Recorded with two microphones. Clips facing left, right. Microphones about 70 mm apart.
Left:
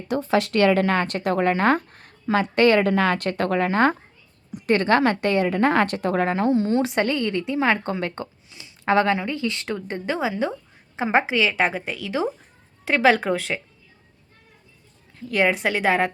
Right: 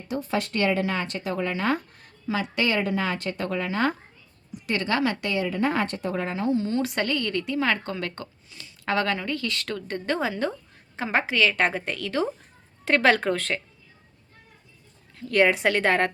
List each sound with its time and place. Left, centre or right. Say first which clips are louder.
0.3 s speech: left 7 dB; left
3.7 s a woman's voice: left 6 dB; left
6.5 s a woman's voice: left 4 dB; left
10.1 s a woman's voice: left 2 dB; centre
15.1 s a woman's voice: even; centre